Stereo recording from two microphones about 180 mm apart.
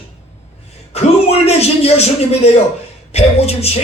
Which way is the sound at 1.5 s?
35° left (ahead or behind).